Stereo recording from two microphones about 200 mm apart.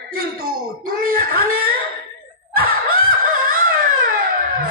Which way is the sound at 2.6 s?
45° right (ahead or behind).